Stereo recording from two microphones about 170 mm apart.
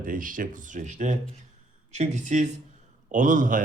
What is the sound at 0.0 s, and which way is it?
Speech, 55° right (ahead or behind).